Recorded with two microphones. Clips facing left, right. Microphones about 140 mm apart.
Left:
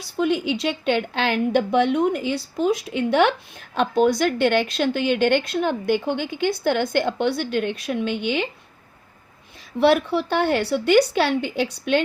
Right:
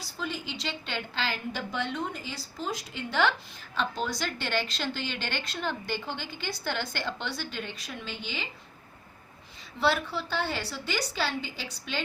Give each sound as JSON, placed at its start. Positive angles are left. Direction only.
{"t": 0.2, "sound": "a woman's voice", "side_deg": 65}
{"t": 9.7, "sound": "a woman's voice", "side_deg": 60}